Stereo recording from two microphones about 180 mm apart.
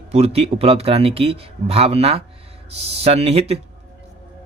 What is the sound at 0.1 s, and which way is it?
Speech, 35° right (ahead or behind).